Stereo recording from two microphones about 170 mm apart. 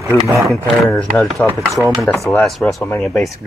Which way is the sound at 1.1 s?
5° left (ahead or behind).